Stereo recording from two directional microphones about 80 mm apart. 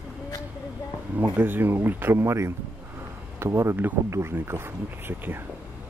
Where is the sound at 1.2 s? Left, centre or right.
Right.